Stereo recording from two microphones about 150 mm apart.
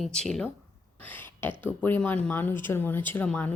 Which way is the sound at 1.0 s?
15° left (ahead or behind).